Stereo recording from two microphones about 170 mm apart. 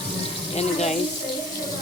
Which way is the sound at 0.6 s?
40° left (ahead or behind).